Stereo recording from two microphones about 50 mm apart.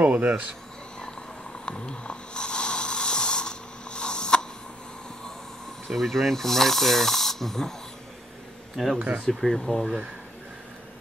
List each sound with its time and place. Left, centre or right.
0.0 s speech: right
1.7 s snoring: centre
5.9 s speech: centre
8.8 s speech: centre